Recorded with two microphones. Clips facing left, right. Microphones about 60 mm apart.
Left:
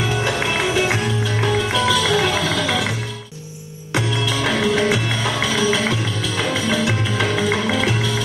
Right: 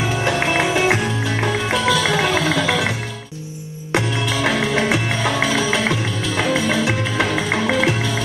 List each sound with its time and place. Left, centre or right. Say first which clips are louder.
0.2 s music: right 2 dB; right
4.3 s music: even; centre